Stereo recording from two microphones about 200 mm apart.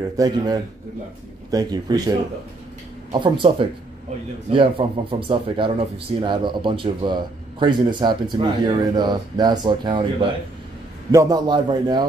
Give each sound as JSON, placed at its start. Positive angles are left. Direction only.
{"t": 0.2, "sound": "a man's voice", "side_deg": -15}
{"t": 1.5, "sound": "speech", "side_deg": -20}